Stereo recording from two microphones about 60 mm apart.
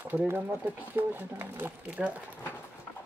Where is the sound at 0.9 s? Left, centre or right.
Right.